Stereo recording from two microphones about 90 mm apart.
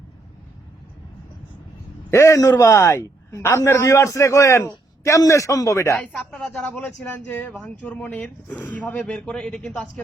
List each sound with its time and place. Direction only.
2.0 s a man's voice: 30° left (ahead or behind)
6.3 s a man's voice: 15° left (ahead or behind)